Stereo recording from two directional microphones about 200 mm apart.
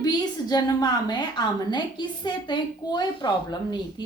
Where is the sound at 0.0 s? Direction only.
20° left (ahead or behind).